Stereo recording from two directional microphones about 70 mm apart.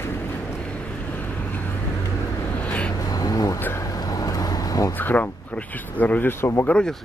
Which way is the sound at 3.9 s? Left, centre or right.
Left.